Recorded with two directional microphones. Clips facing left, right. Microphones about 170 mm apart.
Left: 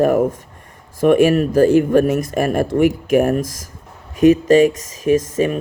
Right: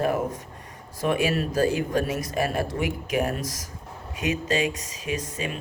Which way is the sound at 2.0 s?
50° left (ahead or behind).